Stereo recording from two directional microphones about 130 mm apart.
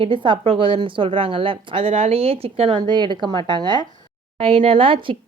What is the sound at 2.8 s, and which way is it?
Speech, 35° right (ahead or behind).